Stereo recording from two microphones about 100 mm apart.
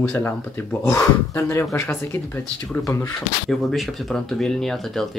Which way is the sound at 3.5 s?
Centre (ahead or behind).